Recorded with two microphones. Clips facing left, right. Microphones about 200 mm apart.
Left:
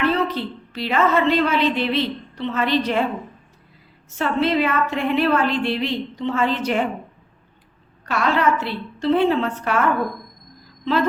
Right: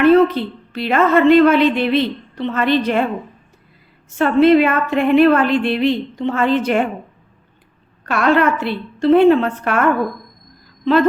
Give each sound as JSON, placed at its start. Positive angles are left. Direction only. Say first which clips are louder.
{"t": 0.0, "sound": "a woman's voice", "louder": "right 10 dB", "side_deg": -55}
{"t": 4.2, "sound": "a woman's voice", "louder": "right 8 dB", "side_deg": -55}
{"t": 8.0, "sound": "a woman's voice", "louder": "right 5 dB", "side_deg": -55}